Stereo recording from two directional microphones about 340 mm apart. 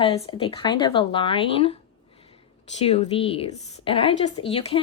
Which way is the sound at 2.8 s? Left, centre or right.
Centre.